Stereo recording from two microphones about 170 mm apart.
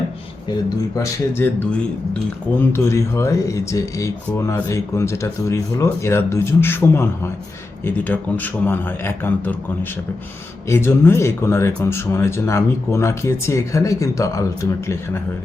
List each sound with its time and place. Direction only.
0.9 s speech: 15° left (ahead or behind)